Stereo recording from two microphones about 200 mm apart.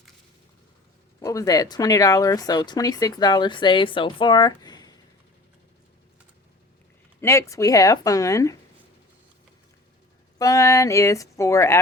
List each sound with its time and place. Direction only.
1.2 s speech: 15° left (ahead or behind)
7.2 s speech: 15° left (ahead or behind)
10.3 s speech: 15° left (ahead or behind)